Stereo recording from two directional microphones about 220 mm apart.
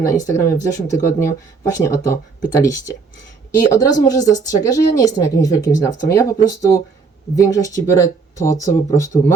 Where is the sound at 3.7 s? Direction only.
15° left (ahead or behind).